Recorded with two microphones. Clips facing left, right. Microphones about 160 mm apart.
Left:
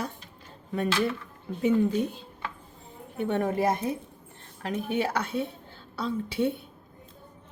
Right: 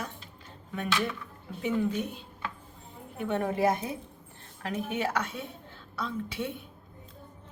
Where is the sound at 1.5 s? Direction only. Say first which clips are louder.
Left 5 dB; 35° left (ahead or behind).